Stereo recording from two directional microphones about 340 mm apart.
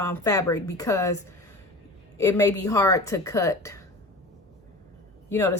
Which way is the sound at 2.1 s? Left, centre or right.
Centre.